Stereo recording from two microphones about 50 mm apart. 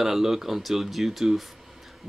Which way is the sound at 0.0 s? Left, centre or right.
Centre.